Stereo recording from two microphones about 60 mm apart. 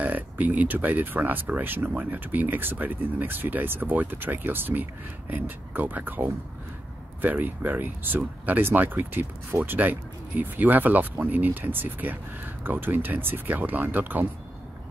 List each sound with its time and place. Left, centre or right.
0.0 s speech: right